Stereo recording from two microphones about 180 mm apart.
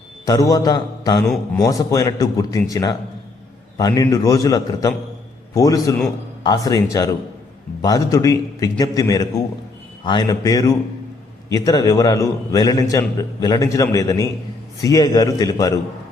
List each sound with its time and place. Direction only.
0.3 s a man's voice: 20° left (ahead or behind)